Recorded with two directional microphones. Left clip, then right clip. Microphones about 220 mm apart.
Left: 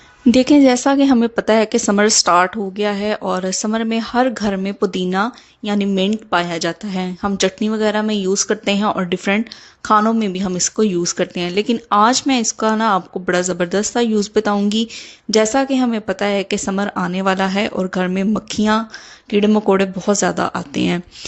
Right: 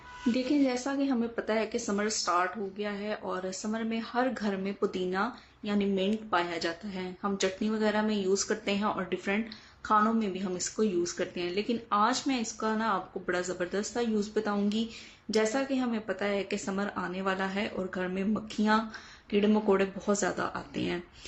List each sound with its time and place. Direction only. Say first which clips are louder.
0.3 s speech: left 17 dB; 45° left (ahead or behind)